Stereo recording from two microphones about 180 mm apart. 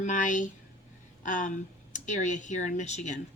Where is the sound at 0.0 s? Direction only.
45° left (ahead or behind).